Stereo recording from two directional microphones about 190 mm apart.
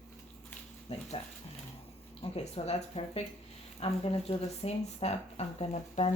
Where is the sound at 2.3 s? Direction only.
35° left (ahead or behind).